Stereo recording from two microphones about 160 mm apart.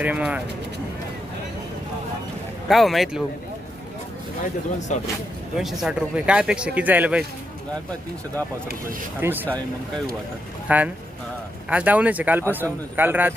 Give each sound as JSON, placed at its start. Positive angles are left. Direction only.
{"t": 0.0, "sound": "speech", "side_deg": -10}
{"t": 2.6, "sound": "speech", "side_deg": 0}
{"t": 4.9, "sound": "speech", "side_deg": 50}
{"t": 5.5, "sound": "speech", "side_deg": 0}
{"t": 9.2, "sound": "speech", "side_deg": -10}
{"t": 10.7, "sound": "speech", "side_deg": -10}